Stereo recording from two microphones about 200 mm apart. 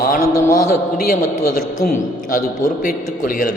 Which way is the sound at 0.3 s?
15° left (ahead or behind).